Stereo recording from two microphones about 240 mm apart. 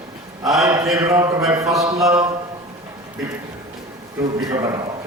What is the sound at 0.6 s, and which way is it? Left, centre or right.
Mantra, centre.